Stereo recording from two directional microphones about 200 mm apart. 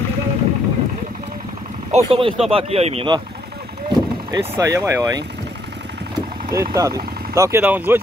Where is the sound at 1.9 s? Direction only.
25° right (ahead or behind).